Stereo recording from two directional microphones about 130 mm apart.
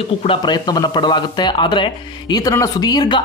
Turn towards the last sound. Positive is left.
turn(degrees=35)  # may be behind; listen again after turning